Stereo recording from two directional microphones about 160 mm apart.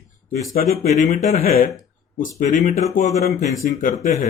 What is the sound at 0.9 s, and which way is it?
Speech, 45° left (ahead or behind).